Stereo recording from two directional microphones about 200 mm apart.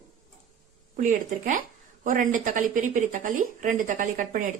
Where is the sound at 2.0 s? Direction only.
40° right (ahead or behind).